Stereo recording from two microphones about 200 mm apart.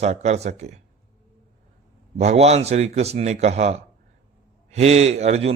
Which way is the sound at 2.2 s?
35° right (ahead or behind).